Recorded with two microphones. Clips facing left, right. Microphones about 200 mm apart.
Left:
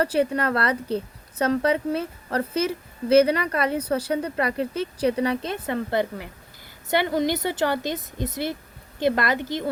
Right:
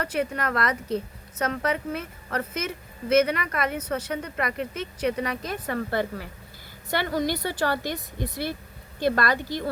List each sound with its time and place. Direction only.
0.0 s a woman's voice: 30° left (ahead or behind)